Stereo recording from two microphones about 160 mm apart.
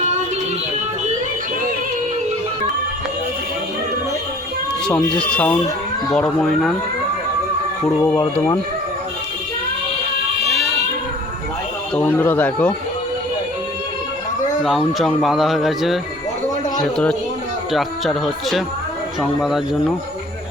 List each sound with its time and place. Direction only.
4.9 s speech: 5° left (ahead or behind)
7.9 s speech: 15° left (ahead or behind)
11.9 s speech: 15° left (ahead or behind)
14.6 s speech: centre (ahead or behind)